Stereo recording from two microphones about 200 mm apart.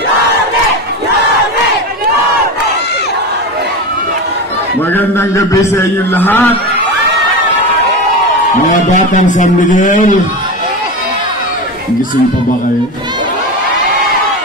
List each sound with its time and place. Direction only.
4.9 s a man's voice: 15° left (ahead or behind)
8.6 s speech: 40° left (ahead or behind)